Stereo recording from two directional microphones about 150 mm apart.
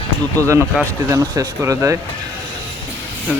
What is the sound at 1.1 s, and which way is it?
Speech, 20° right (ahead or behind).